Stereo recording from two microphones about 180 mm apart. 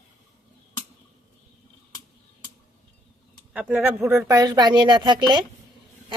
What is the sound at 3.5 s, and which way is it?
Speech, 10° right (ahead or behind).